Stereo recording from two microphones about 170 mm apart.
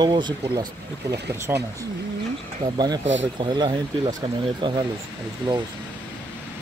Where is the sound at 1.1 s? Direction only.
15° right (ahead or behind).